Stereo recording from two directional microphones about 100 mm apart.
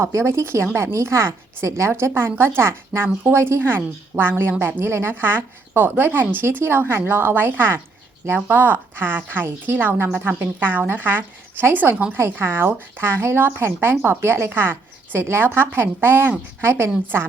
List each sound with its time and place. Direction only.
0.0 s a woman's voice: 25° right (ahead or behind)